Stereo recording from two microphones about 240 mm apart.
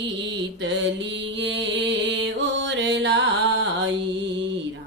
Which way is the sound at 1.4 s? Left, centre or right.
Right.